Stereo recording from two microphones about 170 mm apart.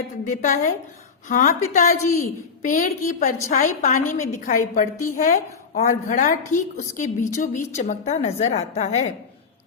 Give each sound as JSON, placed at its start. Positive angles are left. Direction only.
{"t": 0.3, "sound": "a woman's voice", "side_deg": 45}